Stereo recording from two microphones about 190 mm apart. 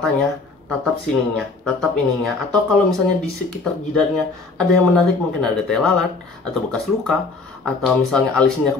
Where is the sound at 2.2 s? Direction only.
Centre (ahead or behind).